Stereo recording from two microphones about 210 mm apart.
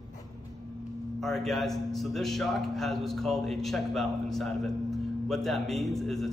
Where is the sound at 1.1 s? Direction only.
Centre (ahead or behind).